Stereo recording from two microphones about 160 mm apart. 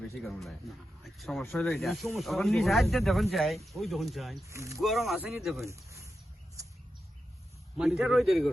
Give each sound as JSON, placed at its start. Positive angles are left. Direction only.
{"t": 0.2, "sound": "speech", "side_deg": 0}
{"t": 4.4, "sound": "speech", "side_deg": -20}
{"t": 4.8, "sound": "speech", "side_deg": 0}
{"t": 5.6, "sound": "speech", "side_deg": -20}
{"t": 7.8, "sound": "speech", "side_deg": 0}